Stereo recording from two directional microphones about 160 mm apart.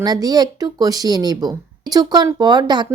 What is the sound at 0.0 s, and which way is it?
Speech, 25° right (ahead or behind).